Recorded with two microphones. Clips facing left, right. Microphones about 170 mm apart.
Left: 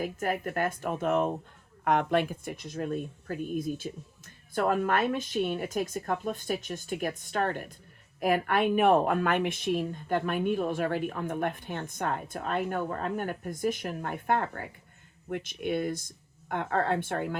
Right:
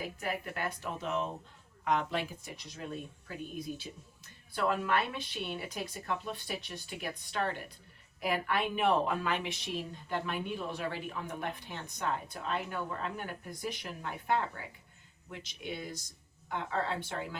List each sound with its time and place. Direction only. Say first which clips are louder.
0.0 s a woman's voice: left 7 dB; 50° left (ahead or behind)